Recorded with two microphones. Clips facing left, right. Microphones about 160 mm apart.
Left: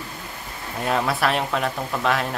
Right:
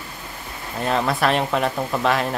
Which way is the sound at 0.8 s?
5° left (ahead or behind).